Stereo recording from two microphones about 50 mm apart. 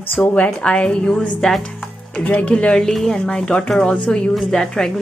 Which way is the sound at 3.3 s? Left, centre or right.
Left.